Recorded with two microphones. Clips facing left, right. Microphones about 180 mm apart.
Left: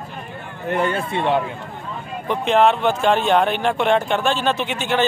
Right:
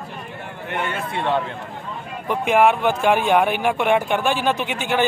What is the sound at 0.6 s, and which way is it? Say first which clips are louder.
Speech: left 6 dB; 35° left (ahead or behind).